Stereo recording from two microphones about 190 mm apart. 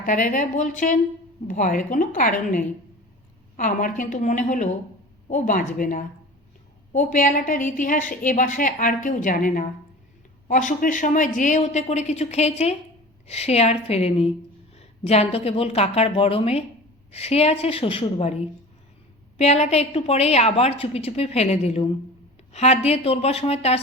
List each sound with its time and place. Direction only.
0.0 s a woman's voice: 45° left (ahead or behind)
3.6 s a woman's voice: 45° left (ahead or behind)